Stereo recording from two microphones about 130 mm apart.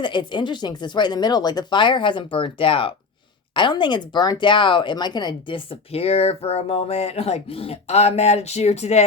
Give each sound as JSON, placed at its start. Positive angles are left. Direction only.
{"t": 0.0, "sound": "speech", "side_deg": 35}